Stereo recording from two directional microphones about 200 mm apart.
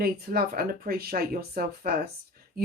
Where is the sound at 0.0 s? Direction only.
50° right (ahead or behind).